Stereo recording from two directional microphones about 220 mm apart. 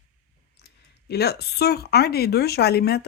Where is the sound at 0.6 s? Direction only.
45° left (ahead or behind).